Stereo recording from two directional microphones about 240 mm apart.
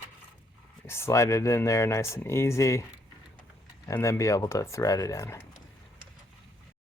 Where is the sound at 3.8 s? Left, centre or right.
Centre.